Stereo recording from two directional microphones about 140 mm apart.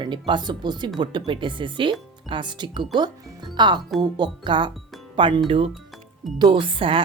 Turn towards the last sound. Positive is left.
turn(degrees=-40)  # may be behind; listen again after turning